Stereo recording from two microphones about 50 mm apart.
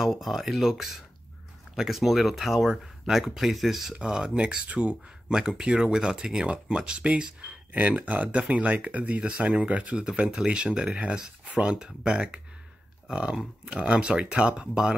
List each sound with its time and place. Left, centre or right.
0.0 s speech: centre
3.9 s speech: centre
7.7 s speech: right; by 11.0 s centre
11.4 s speech: right